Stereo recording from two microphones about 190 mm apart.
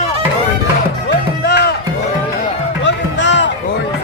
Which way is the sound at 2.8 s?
70° left (ahead or behind).